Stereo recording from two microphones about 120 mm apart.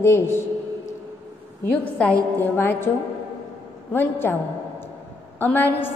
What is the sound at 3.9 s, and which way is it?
Speech, 15° left (ahead or behind).